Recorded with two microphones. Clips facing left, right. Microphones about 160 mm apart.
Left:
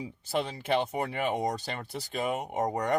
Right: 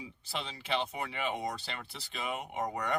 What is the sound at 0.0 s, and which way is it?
Speech, 45° left (ahead or behind).